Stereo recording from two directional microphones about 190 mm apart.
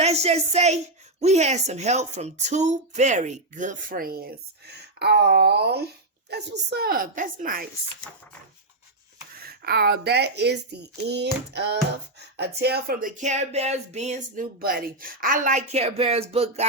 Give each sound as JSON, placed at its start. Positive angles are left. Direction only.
{"t": 0.0, "sound": "a sound", "side_deg": -35}
{"t": 1.2, "sound": "a woman's voice", "side_deg": -35}
{"t": 9.5, "sound": "speech", "side_deg": -55}
{"t": 14.6, "sound": "a woman's voice", "side_deg": -50}